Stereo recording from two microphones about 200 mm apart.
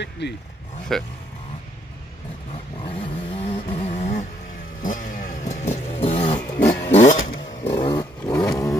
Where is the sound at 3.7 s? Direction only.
35° left (ahead or behind).